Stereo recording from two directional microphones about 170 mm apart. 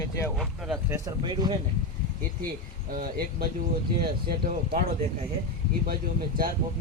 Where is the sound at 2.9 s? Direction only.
60° right (ahead or behind).